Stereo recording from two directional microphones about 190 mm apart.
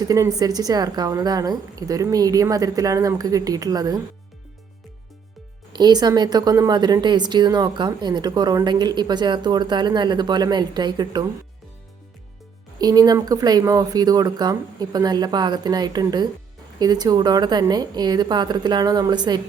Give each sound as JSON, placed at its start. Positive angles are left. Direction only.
{"t": 0.0, "sound": "a woman's voice", "side_deg": -20}
{"t": 5.7, "sound": "a woman's voice", "side_deg": -20}
{"t": 12.8, "sound": "a woman's voice", "side_deg": -20}